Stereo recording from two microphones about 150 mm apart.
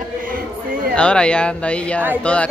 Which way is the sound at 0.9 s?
5° left (ahead or behind).